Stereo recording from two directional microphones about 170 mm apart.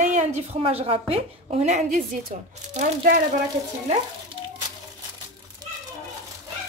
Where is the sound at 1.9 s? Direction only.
55° right (ahead or behind).